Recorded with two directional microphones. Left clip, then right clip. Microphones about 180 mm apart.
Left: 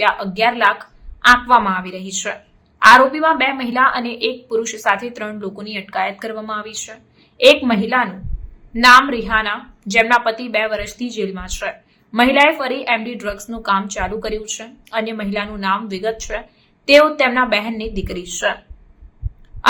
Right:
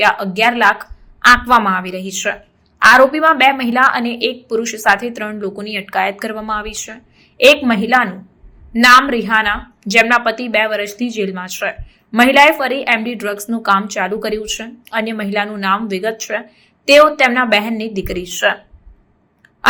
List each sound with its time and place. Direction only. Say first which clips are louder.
0.0 s a woman's voice: right 3 dB; 15° right (ahead or behind)